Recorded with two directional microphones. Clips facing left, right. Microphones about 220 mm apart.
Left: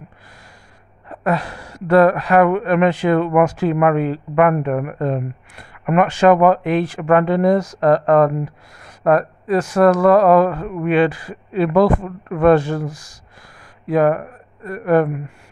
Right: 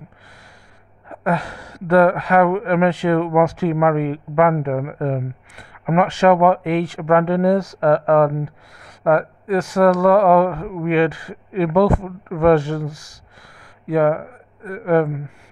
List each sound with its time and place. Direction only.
1.2 s speech: 30° left (ahead or behind)